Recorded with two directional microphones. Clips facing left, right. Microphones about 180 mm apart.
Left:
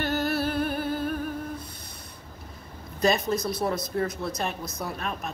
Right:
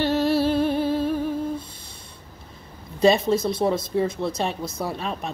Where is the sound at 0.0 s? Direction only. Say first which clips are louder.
Right 6 dB; 25° right (ahead or behind).